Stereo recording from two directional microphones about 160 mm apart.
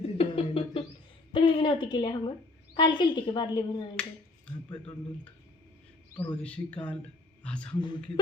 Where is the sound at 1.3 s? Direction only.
35° left (ahead or behind).